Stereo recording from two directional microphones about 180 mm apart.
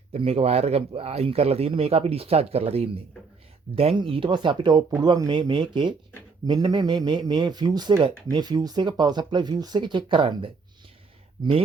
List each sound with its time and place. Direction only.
0.1 s speech: 35° right (ahead or behind)